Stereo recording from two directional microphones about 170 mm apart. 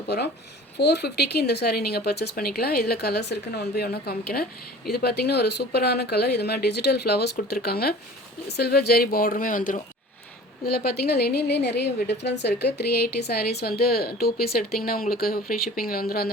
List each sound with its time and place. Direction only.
0.8 s a woman's voice: 75° left (ahead or behind); by 9.8 s 50° left (ahead or behind)
10.7 s a woman's voice: 65° left (ahead or behind)